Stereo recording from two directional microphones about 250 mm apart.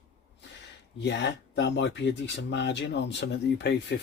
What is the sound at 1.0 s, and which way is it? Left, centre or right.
Speech, left.